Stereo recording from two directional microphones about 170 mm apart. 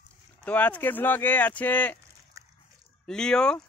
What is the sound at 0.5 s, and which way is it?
Speech, 10° left (ahead or behind).